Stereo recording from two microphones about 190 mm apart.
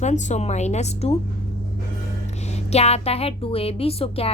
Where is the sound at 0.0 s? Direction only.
35° left (ahead or behind).